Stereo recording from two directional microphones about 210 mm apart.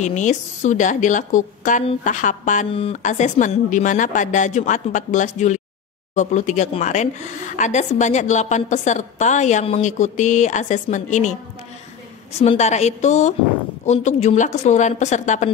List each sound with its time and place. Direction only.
0.0 s a woman's voice: 35° left (ahead or behind)
12.4 s a woman's voice: 30° left (ahead or behind)